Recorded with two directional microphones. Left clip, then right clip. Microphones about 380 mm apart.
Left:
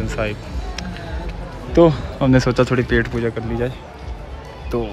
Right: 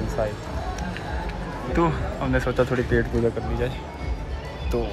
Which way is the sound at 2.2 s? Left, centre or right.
Left.